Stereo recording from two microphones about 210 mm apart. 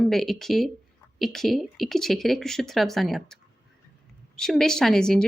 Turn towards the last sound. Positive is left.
turn(degrees=5)  # may be behind; listen again after turning